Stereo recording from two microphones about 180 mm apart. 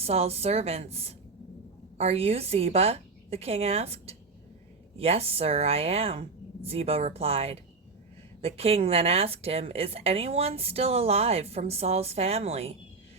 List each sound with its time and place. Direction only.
0.0 s a woman's voice: 35° right (ahead or behind)